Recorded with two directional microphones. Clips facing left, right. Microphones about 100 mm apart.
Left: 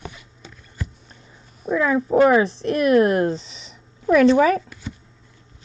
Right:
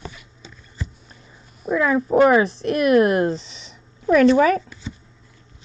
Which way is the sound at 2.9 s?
15° right (ahead or behind).